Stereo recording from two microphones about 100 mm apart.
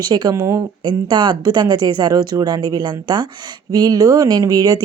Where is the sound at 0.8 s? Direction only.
50° right (ahead or behind).